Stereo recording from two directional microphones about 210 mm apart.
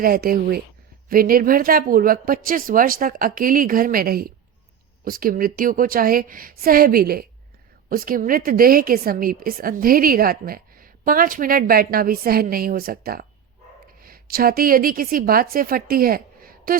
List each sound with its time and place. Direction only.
0.0 s a woman's voice: 45° right (ahead or behind)